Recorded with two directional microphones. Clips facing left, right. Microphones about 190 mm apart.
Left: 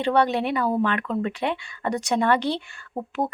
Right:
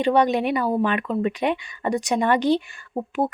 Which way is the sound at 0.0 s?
15° right (ahead or behind).